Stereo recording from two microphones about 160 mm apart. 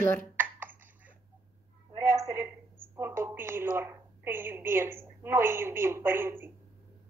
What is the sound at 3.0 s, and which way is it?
A woman's voice, 15° right (ahead or behind).